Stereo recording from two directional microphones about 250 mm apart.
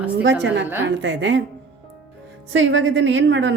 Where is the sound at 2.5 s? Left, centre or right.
Right.